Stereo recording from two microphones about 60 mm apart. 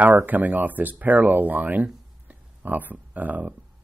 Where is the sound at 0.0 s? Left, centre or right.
Right.